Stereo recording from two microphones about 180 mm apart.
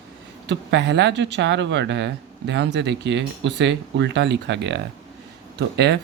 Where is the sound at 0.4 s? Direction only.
75° right (ahead or behind).